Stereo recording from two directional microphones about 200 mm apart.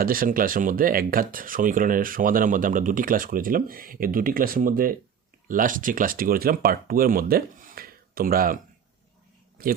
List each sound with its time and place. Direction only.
0.0 s speech: 45° right (ahead or behind)